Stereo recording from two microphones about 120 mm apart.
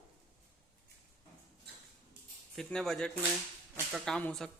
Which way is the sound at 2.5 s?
5° left (ahead or behind).